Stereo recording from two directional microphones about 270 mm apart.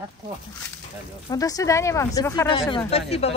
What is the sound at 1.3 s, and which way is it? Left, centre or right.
Speech, centre.